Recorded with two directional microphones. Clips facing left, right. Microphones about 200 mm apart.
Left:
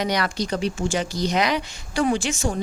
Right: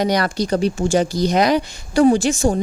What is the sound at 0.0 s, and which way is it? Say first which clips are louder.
Speech: right 5 dB; 35° right (ahead or behind).